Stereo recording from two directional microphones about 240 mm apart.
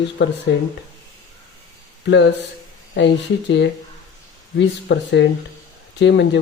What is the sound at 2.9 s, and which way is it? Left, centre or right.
Speech, left.